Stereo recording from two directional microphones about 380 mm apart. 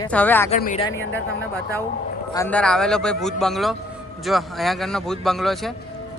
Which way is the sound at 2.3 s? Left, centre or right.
Centre.